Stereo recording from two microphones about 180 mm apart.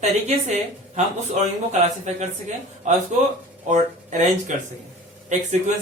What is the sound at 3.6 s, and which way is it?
A man's voice, 40° right (ahead or behind).